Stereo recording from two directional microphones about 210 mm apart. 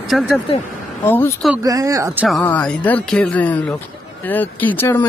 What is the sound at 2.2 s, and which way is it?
A man's voice, 5° left (ahead or behind).